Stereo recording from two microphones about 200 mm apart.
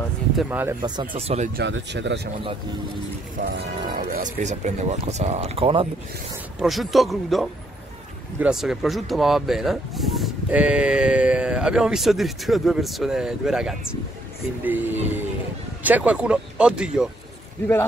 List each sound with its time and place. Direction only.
0.4 s music: 10° right (ahead or behind)
0.8 s speech: 25° right (ahead or behind)
1.6 s speech: 60° right (ahead or behind)
3.3 s speech: 40° right (ahead or behind)
6.6 s speech: centre (ahead or behind)
14.6 s music: 10° right (ahead or behind)
15.8 s speech: 5° right (ahead or behind)